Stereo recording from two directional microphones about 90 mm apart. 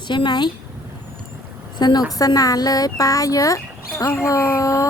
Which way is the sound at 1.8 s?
50° left (ahead or behind).